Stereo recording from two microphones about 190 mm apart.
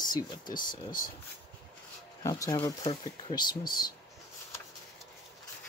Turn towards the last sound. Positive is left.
turn(degrees=20)  # may be behind; listen again after turning